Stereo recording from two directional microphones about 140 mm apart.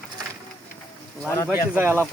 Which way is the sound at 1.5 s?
15° right (ahead or behind).